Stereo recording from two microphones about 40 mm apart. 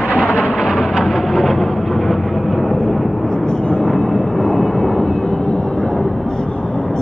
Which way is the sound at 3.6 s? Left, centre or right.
Left.